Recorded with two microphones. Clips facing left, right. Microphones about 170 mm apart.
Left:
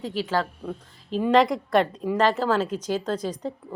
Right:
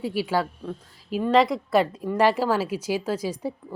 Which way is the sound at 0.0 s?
10° right (ahead or behind).